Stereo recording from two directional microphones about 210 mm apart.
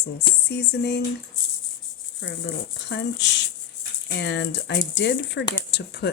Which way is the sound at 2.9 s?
55° left (ahead or behind).